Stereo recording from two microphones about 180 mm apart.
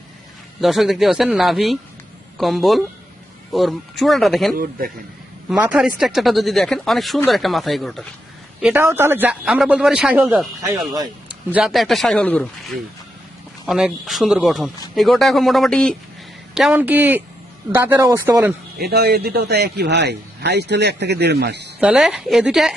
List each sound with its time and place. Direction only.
0.6 s speech: centre (ahead or behind)
4.5 s a man's voice: 55° right (ahead or behind)
5.5 s speech: 10° right (ahead or behind)
8.6 s speech: 10° right (ahead or behind)
11.5 s speech: centre (ahead or behind)
18.8 s a man's voice: 60° right (ahead or behind)
21.8 s speech: 5° right (ahead or behind)